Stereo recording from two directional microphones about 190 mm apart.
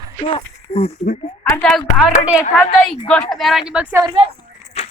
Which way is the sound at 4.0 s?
25° right (ahead or behind).